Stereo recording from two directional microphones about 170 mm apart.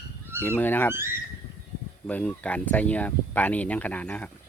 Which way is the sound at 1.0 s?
15° right (ahead or behind).